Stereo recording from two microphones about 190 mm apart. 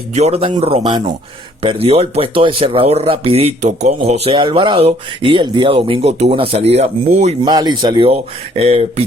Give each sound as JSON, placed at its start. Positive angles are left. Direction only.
{"t": 0.1, "sound": "speech", "side_deg": -35}
{"t": 7.4, "sound": "speech", "side_deg": -20}